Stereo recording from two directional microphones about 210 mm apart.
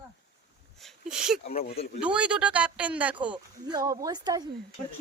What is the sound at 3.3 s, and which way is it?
Speech, 20° right (ahead or behind).